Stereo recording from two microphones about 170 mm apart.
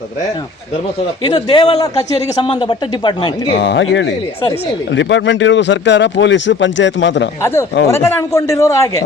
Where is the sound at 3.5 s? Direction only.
90° left.